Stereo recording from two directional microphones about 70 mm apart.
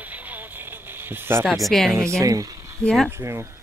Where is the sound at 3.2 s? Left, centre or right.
Right.